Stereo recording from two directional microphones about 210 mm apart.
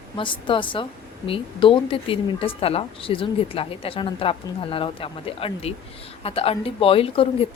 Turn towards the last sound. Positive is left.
turn(degrees=25)  # may be behind; listen again after turning